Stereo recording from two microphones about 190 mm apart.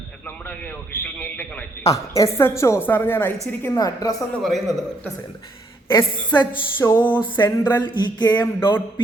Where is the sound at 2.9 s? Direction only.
10° left (ahead or behind).